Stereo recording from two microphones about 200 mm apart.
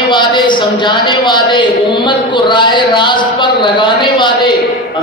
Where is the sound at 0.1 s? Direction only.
25° left (ahead or behind).